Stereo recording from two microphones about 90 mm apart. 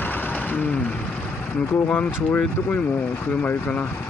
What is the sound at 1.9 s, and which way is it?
Speech, 20° left (ahead or behind).